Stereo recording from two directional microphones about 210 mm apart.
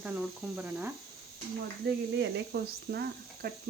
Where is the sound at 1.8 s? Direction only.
50° right (ahead or behind).